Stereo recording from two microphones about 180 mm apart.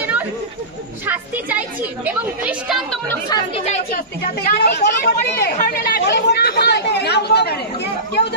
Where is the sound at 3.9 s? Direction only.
60° left (ahead or behind).